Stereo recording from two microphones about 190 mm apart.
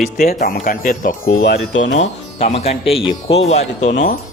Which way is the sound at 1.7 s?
80° left.